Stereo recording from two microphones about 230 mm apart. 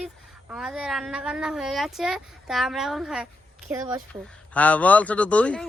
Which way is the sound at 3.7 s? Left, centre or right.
Centre.